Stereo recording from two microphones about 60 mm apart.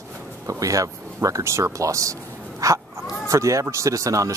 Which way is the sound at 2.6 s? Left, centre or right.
Right.